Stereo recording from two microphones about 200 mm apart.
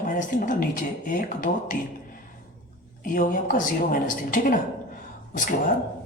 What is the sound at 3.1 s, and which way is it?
Speech, 45° left (ahead or behind).